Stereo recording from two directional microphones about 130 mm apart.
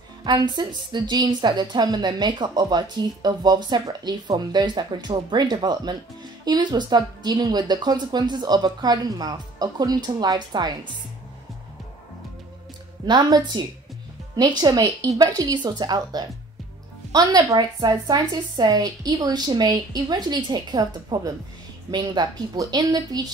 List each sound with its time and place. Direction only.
0.2 s a woman's voice: 35° right (ahead or behind)
13.0 s a woman's voice: 35° right (ahead or behind)